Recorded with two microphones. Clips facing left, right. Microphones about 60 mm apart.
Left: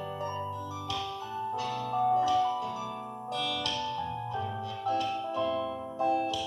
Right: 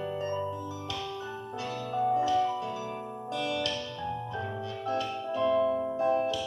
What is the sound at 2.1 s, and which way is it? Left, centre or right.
Music, right.